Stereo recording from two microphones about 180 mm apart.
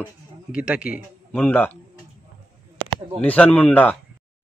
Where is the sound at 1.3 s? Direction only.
10° left (ahead or behind).